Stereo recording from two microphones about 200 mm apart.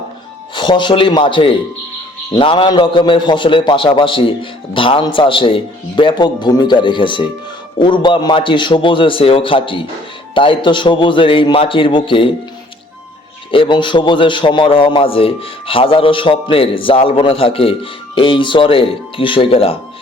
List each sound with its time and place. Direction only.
0.5 s a man's voice: 25° left (ahead or behind)
13.5 s a man's voice: 25° left (ahead or behind)